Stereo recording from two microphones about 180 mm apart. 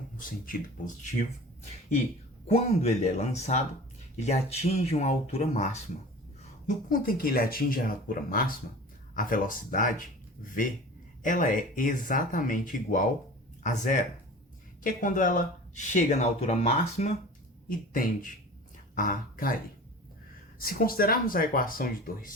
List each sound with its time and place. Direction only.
0.2 s speech: 50° left (ahead or behind)
2.5 s speech: 35° left (ahead or behind)
6.7 s speech: 50° left (ahead or behind)
11.2 s speech: 45° left (ahead or behind)
17.7 s speech: 50° left (ahead or behind)
20.6 s speech: 55° left (ahead or behind)